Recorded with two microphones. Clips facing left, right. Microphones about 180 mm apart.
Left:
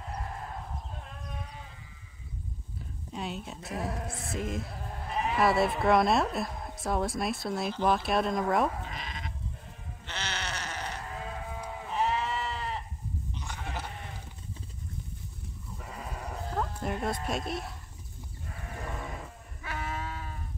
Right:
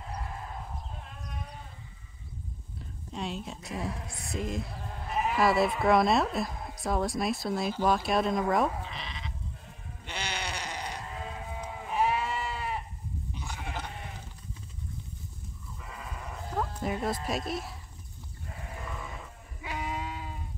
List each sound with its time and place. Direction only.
3.1 s speech: centre (ahead or behind)
8.8 s sheep: 45° left (ahead or behind)
10.0 s sheep: 10° right (ahead or behind)
15.8 s sheep: 40° left (ahead or behind)
16.5 s speech: centre (ahead or behind)
19.6 s sheep: 15° right (ahead or behind)